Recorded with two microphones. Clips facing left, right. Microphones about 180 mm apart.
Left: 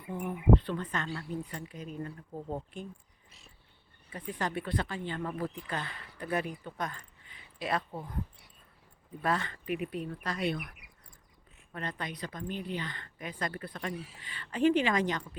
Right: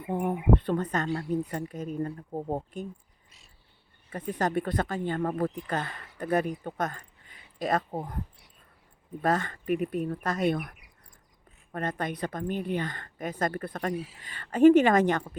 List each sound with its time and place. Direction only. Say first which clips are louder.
0.1 s speech: right 7 dB; 55° right (ahead or behind)
0.6 s speech: right 7 dB; 45° right (ahead or behind)
4.1 s speech: right 7 dB; 45° right (ahead or behind)
9.2 s speech: right 5 dB; 45° right (ahead or behind)